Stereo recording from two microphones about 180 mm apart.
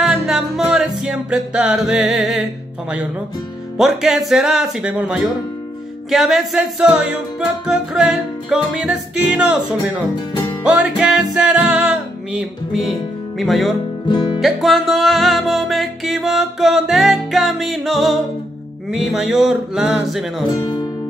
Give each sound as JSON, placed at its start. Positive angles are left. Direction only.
{"t": 0.0, "sound": "music", "side_deg": 0}
{"t": 3.7, "sound": "music", "side_deg": 0}
{"t": 14.0, "sound": "music", "side_deg": 25}
{"t": 14.4, "sound": "music", "side_deg": 0}
{"t": 20.5, "sound": "speech", "side_deg": 25}